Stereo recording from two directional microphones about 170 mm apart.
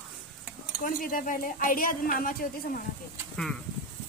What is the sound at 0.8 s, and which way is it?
Speech, 55° left (ahead or behind).